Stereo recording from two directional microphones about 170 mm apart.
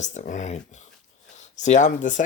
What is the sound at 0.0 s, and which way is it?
Speech, 45° left (ahead or behind).